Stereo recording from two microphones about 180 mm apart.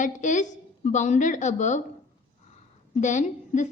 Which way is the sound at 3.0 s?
40° left (ahead or behind).